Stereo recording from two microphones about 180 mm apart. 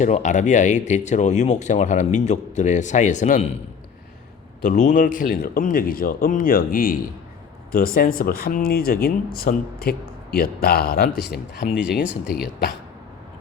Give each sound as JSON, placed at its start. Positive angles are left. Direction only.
{"t": 0.0, "sound": "speech", "side_deg": 40}
{"t": 4.6, "sound": "speech", "side_deg": 50}